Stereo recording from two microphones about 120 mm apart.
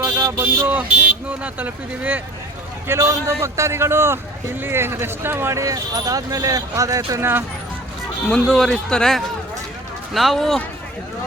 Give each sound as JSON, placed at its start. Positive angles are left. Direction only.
{"t": 0.0, "sound": "speech", "side_deg": -20}
{"t": 8.3, "sound": "speech", "side_deg": 5}